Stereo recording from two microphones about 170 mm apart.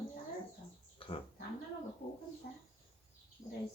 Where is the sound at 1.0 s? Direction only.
30° left (ahead or behind).